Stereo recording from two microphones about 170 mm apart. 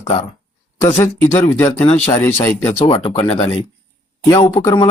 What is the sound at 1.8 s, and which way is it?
Speech, 35° left (ahead or behind).